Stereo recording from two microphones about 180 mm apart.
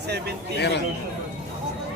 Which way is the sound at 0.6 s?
70° left (ahead or behind).